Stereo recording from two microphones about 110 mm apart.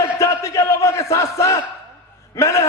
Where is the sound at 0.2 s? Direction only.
25° left (ahead or behind).